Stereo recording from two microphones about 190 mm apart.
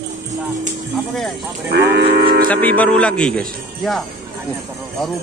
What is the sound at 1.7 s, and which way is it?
Livestock, 60° right (ahead or behind).